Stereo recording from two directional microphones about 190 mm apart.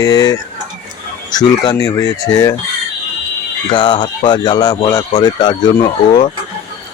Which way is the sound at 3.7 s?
25° left (ahead or behind).